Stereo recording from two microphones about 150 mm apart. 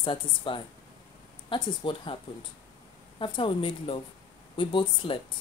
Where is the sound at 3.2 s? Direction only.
35° left (ahead or behind).